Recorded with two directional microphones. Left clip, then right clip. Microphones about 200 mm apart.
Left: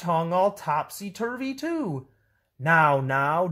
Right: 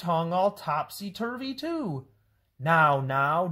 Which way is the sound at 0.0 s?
25° left (ahead or behind).